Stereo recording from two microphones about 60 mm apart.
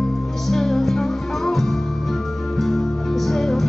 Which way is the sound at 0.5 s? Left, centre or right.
Centre.